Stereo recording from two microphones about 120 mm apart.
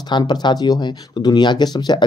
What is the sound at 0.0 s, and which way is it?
Speech, 35° left (ahead or behind).